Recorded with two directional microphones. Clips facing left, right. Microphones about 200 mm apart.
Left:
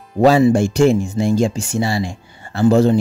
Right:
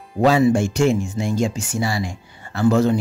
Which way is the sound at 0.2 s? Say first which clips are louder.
Left 4 dB; 35° left (ahead or behind).